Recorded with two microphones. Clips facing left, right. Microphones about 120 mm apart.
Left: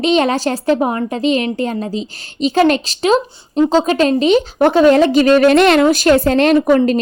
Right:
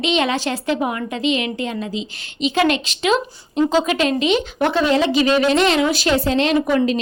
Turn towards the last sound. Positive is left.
turn(degrees=45)  # may be behind; listen again after turning